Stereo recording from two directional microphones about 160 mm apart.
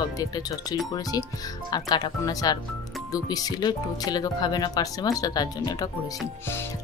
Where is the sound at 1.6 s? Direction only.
25° left (ahead or behind).